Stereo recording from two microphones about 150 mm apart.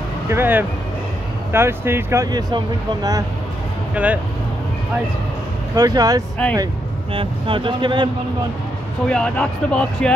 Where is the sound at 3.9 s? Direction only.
10° right (ahead or behind).